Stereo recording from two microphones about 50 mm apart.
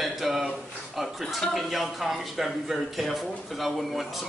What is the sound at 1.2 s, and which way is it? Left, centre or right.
Speech, centre.